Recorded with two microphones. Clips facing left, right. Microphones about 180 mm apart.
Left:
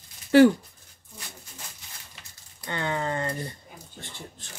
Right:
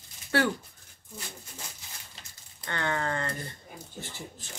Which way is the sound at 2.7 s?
15° left (ahead or behind).